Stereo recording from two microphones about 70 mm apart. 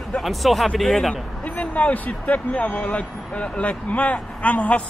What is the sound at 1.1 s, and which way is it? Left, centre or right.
Speech, left.